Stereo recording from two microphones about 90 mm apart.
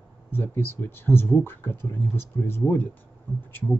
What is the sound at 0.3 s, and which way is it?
Speech, 25° left (ahead or behind).